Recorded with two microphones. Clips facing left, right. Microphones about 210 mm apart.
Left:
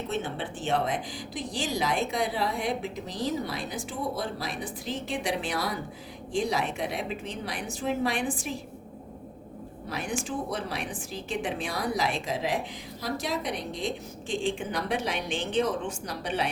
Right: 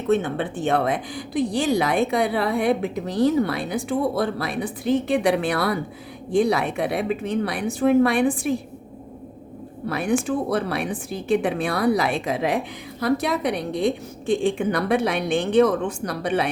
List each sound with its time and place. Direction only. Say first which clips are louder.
0.1 s speech: right 15 dB; 55° right (ahead or behind)
9.8 s speech: right 11 dB; 60° right (ahead or behind)